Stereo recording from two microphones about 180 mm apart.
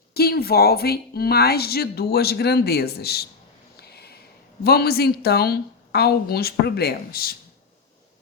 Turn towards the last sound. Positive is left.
turn(degrees=55)  # may be behind; listen again after turning